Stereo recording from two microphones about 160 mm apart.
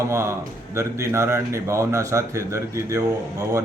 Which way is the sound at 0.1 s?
15° right (ahead or behind).